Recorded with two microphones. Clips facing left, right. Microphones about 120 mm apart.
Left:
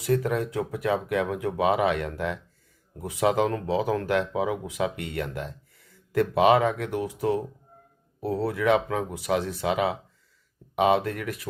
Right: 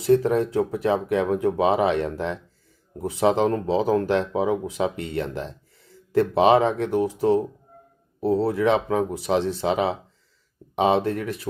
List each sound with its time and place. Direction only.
0.0 s speech: 30° right (ahead or behind)